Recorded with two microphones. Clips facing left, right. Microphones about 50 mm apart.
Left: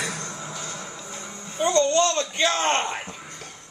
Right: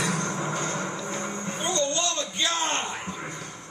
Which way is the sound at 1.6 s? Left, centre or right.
Left.